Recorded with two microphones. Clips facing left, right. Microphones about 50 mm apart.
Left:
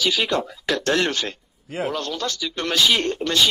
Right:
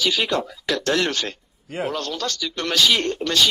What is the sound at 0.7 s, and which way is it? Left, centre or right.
Speech, left.